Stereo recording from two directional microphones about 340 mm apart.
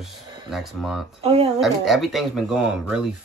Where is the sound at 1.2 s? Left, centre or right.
Centre.